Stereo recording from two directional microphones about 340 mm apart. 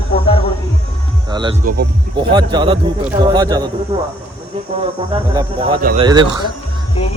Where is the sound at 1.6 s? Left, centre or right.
Right.